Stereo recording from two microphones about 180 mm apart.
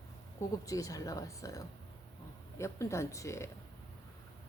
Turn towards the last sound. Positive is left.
turn(degrees=15)  # may be behind; listen again after turning